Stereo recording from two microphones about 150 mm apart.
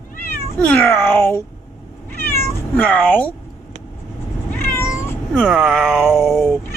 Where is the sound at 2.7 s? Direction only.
10° left (ahead or behind).